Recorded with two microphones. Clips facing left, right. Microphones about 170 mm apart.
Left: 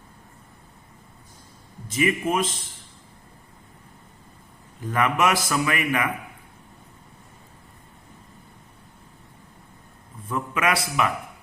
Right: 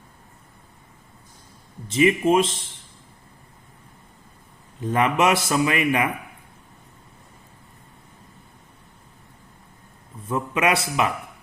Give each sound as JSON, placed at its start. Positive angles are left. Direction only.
{"t": 1.9, "sound": "a man's voice", "side_deg": -25}
{"t": 4.8, "sound": "a man's voice", "side_deg": -25}
{"t": 10.2, "sound": "a man's voice", "side_deg": -25}